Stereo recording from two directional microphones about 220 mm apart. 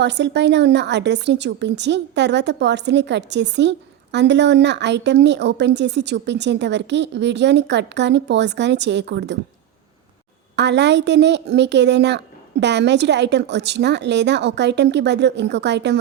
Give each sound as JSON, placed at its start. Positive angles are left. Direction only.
{"t": 0.0, "sound": "a woman's voice", "side_deg": -50}
{"t": 10.5, "sound": "a woman's voice", "side_deg": -50}